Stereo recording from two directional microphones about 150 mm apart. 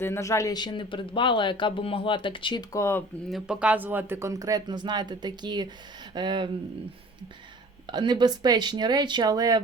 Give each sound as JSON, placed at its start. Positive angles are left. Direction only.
{"t": 0.0, "sound": "speech", "side_deg": 20}
{"t": 3.2, "sound": "speech", "side_deg": -5}
{"t": 7.9, "sound": "speech", "side_deg": -30}